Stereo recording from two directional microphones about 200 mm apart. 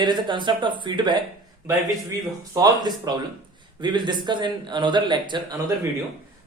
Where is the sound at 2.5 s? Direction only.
20° right (ahead or behind).